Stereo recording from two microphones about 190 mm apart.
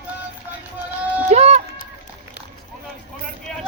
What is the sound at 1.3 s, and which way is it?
Music, 35° right (ahead or behind).